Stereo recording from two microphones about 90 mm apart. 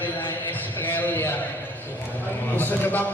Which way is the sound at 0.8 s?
20° left (ahead or behind).